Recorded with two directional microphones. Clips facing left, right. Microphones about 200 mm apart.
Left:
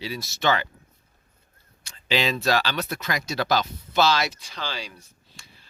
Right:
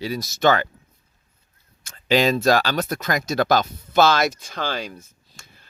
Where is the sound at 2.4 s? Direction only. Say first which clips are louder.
Right 5 dB; 45° right (ahead or behind).